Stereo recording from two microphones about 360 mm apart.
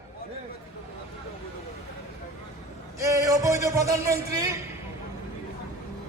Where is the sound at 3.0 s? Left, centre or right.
Centre.